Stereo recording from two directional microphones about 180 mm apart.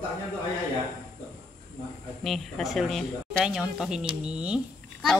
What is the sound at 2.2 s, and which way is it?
Speech, centre (ahead or behind).